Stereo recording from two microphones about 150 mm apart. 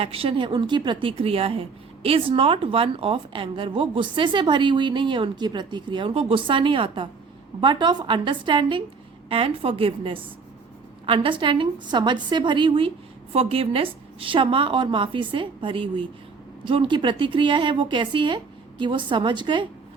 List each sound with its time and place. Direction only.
0.0 s a woman's voice: 40° right (ahead or behind)